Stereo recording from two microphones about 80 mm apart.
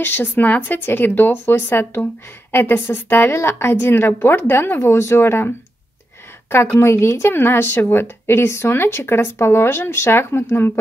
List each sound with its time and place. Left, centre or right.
0.0 s speech: left
6.5 s speech: left